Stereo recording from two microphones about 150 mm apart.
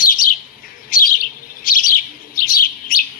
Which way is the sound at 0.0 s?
65° left (ahead or behind).